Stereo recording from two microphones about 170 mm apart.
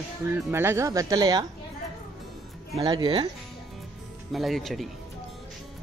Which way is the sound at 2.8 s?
25° right (ahead or behind).